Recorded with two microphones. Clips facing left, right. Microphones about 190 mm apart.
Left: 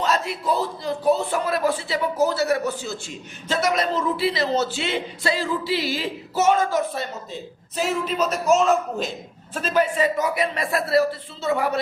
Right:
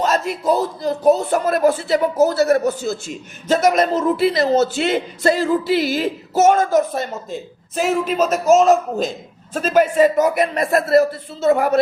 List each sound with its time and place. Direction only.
0.0 s speech: 45° right (ahead or behind)